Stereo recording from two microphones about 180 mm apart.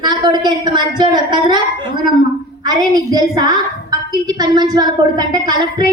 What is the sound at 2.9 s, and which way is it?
A woman's voice, 20° right (ahead or behind).